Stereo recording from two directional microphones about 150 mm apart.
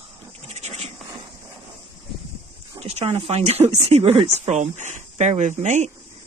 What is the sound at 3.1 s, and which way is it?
Speech, 45° right (ahead or behind).